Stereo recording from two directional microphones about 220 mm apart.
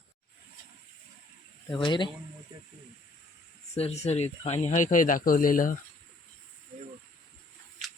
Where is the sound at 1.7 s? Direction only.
20° left (ahead or behind).